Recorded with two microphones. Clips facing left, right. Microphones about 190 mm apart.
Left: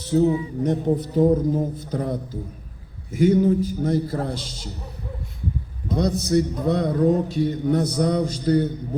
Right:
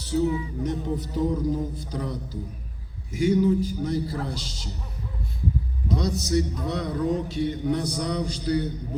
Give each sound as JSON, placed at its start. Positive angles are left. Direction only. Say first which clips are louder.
{"t": 0.0, "sound": "music", "louder": "left 5 dB", "side_deg": 55}
{"t": 0.6, "sound": "a man's voice", "louder": "left 9 dB", "side_deg": 60}
{"t": 5.9, "sound": "a man's voice", "louder": "left 4 dB", "side_deg": 55}